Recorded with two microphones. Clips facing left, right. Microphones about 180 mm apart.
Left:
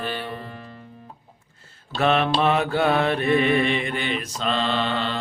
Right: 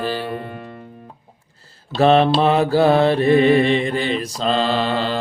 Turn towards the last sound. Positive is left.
turn(degrees=-35)  # may be behind; listen again after turning